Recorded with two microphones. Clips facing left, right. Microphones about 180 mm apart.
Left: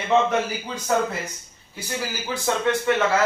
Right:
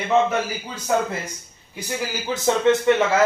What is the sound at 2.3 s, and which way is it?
Speech, 20° right (ahead or behind).